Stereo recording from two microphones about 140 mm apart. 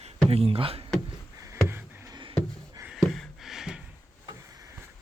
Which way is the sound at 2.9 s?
Centre (ahead or behind).